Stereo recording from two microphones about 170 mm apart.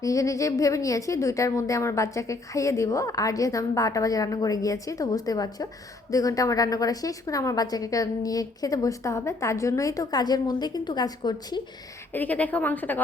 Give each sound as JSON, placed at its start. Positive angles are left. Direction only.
{"t": 0.0, "sound": "a woman's voice", "side_deg": 20}
{"t": 12.1, "sound": "a woman's voice", "side_deg": 10}